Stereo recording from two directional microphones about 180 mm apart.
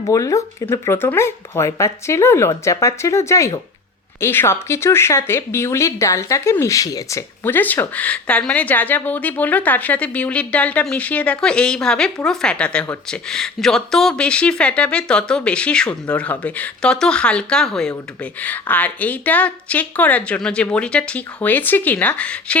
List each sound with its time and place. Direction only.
0.1 s speech: 20° left (ahead or behind)